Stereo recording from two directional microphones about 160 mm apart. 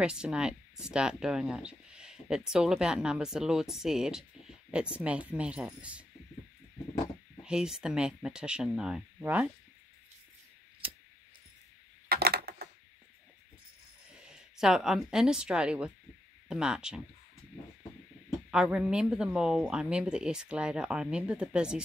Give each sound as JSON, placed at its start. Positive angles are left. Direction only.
{"t": 0.0, "sound": "speech", "side_deg": -5}
{"t": 7.4, "sound": "speech", "side_deg": -5}
{"t": 12.1, "sound": "a sound", "side_deg": -75}
{"t": 14.1, "sound": "speech", "side_deg": -5}
{"t": 18.5, "sound": "speech", "side_deg": -5}